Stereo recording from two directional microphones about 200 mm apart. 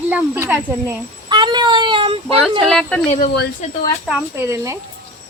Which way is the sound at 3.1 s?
45° left (ahead or behind).